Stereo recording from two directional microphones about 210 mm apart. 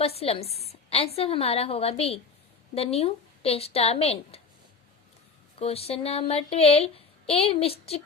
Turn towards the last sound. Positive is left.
turn(degrees=30)  # may be behind; listen again after turning